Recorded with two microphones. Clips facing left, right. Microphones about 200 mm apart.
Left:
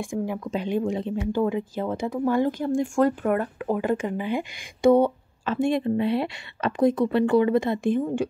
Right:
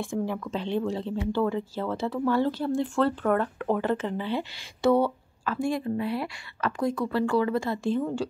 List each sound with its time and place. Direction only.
0.0 s speech: 15° left (ahead or behind)